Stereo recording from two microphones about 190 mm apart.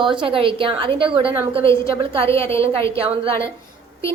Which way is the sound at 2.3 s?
15° left (ahead or behind).